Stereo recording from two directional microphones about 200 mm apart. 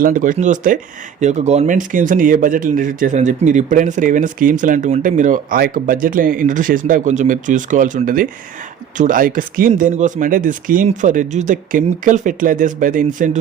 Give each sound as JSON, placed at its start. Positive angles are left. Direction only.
{"t": 0.0, "sound": "speech", "side_deg": -40}